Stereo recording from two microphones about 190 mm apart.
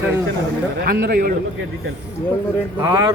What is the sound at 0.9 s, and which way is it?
Speech, 55° right (ahead or behind).